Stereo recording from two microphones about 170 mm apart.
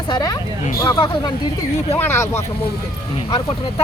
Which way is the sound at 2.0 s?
15° left (ahead or behind).